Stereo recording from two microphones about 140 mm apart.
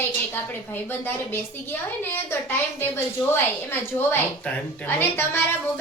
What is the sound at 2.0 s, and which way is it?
A woman's voice, 15° left (ahead or behind).